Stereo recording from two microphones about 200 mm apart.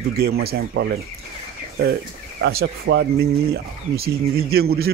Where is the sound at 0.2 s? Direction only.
50° right (ahead or behind).